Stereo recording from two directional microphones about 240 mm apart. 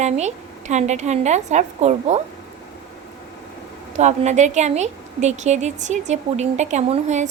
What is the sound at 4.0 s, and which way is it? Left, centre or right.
A woman's voice, right.